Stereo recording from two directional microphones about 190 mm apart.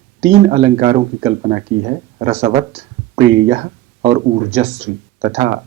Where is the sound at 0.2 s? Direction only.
35° right (ahead or behind).